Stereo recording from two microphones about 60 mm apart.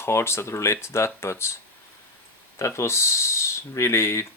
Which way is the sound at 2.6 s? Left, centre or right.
Left.